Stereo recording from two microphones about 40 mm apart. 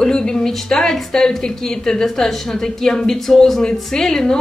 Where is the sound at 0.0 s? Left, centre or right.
Centre.